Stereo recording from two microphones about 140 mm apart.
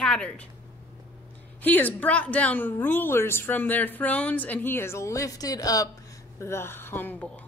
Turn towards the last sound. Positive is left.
turn(degrees=15)  # may be behind; listen again after turning